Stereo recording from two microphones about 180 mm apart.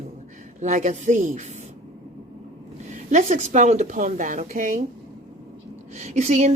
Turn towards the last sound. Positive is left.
turn(degrees=-40)  # may be behind; listen again after turning